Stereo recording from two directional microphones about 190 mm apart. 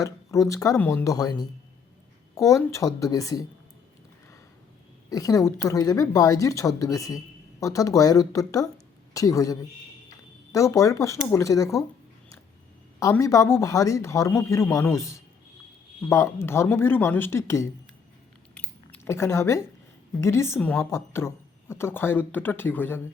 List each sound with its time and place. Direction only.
0.0 s speech: 15° left (ahead or behind)
5.0 s speech: 20° left (ahead or behind)
13.0 s speech: 20° left (ahead or behind)
18.9 s speech: 15° left (ahead or behind)